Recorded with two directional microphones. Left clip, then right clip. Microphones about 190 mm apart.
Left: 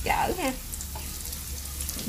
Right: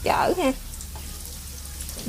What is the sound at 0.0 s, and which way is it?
Speech, 35° right (ahead or behind).